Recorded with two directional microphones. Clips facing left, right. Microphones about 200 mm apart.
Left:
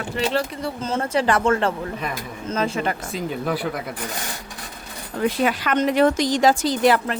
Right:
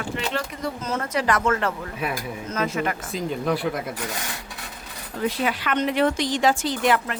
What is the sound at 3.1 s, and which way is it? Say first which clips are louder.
Speech: even; centre (ahead or behind).